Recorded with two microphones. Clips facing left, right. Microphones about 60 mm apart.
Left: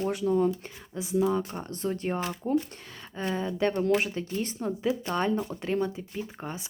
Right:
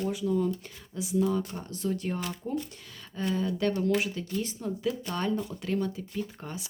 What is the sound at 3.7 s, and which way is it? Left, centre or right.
Speech, left.